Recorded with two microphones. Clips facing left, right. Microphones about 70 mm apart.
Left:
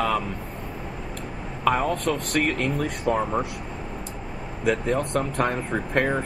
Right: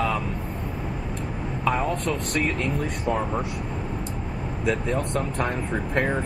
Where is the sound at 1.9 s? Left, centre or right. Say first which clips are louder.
Left 1 dB; left.